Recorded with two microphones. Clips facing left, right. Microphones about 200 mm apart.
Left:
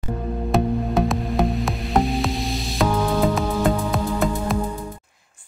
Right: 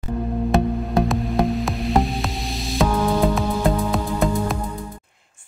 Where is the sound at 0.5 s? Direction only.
Centre (ahead or behind).